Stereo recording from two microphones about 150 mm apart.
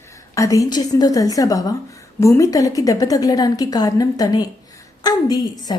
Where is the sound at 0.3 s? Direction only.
20° left (ahead or behind).